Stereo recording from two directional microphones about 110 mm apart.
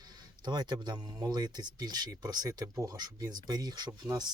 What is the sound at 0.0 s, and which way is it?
Speech, 35° right (ahead or behind).